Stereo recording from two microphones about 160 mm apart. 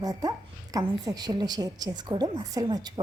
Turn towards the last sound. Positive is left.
turn(degrees=-25)  # may be behind; listen again after turning